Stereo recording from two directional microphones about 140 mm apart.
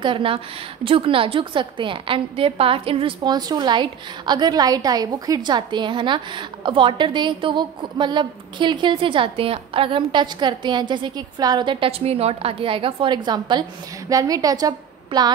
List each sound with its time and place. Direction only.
0.0 s a woman's voice: 40° right (ahead or behind)